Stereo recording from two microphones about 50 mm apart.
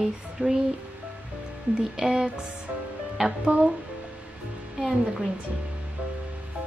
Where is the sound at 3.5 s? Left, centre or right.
Right.